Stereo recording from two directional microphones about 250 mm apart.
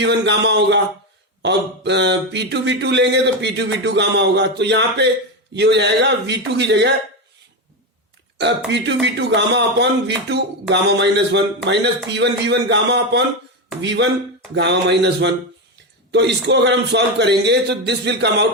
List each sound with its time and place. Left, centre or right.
0.0 s speech: right
8.4 s speech: right